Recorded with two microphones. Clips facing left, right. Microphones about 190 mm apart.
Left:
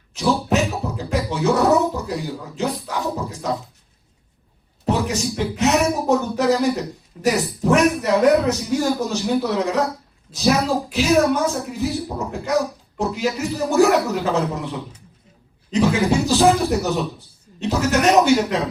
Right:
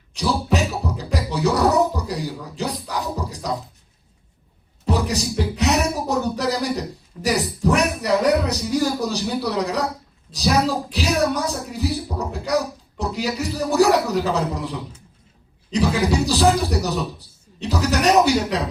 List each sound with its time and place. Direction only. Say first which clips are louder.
0.2 s beatboxing: left 2 dB; 35° right (ahead or behind)
2.9 s speech: left 2 dB; 35° right (ahead or behind)
4.9 s music: left 1 dB; 35° right (ahead or behind)
7.3 s speech: left 2 dB; 35° right (ahead or behind)
11.2 s speech: left 3 dB; 35° right (ahead or behind)